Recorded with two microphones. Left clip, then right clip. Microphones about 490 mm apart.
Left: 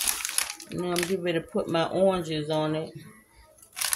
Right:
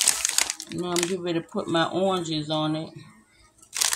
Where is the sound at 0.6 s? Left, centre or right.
Left.